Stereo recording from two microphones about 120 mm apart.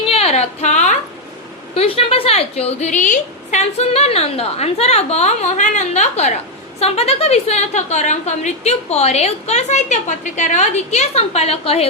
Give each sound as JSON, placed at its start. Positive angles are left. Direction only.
{"t": 0.0, "sound": "a sound", "side_deg": 55}
{"t": 1.7, "sound": "a woman's voice", "side_deg": 55}
{"t": 6.7, "sound": "a woman's voice", "side_deg": 60}